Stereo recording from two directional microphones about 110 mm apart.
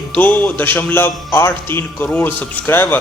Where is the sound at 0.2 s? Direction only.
15° left (ahead or behind).